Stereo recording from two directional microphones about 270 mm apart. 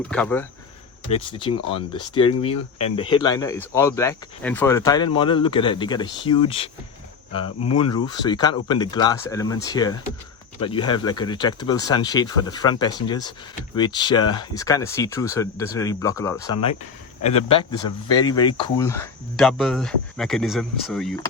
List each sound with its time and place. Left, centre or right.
0.1 s speech: centre
1.0 s speech: centre